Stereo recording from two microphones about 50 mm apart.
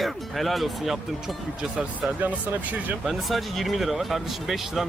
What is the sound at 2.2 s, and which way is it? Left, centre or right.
Speech, right.